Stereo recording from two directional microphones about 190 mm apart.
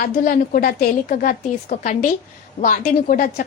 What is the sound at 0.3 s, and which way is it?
A woman's voice, 50° left (ahead or behind).